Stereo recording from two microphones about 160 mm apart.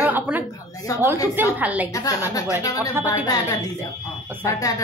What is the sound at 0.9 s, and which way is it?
Speech, 20° left (ahead or behind).